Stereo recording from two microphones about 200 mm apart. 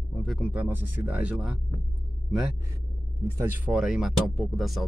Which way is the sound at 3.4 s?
5° right (ahead or behind).